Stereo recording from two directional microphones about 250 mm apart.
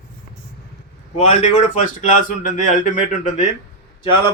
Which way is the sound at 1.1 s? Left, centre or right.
Left.